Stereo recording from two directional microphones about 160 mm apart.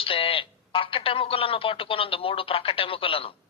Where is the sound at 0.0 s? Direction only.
35° left (ahead or behind).